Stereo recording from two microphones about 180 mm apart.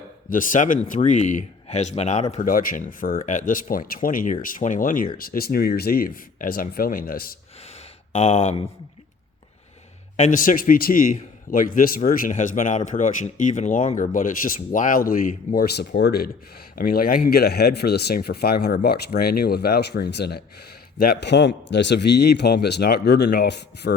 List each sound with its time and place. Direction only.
0.3 s a man's voice: 50° left (ahead or behind)
8.1 s speech: 35° left (ahead or behind)
10.2 s a man's voice: 45° left (ahead or behind); by 23.9 s 65° left (ahead or behind)